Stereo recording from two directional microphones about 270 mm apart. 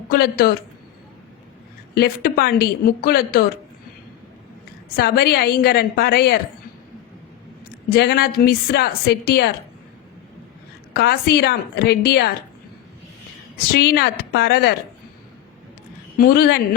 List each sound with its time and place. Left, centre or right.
0.1 s a woman's voice: left
2.0 s a woman's voice: left
4.9 s a woman's voice: left
7.9 s a woman's voice: left
10.9 s a woman's voice: left
13.7 s a woman's voice: left
16.1 s a woman's voice: left